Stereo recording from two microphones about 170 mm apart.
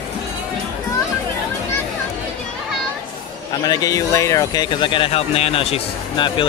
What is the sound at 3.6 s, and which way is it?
Speech, 20° left (ahead or behind).